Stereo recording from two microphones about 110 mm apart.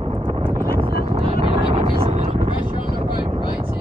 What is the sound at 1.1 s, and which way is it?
Vehicle, 55° right (ahead or behind).